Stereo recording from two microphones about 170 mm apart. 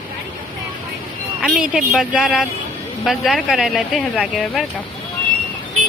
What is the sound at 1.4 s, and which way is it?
Speech, centre (ahead or behind).